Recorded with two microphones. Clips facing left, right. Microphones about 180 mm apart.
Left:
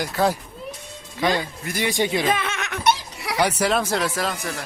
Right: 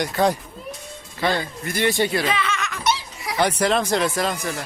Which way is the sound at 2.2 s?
50° left (ahead or behind).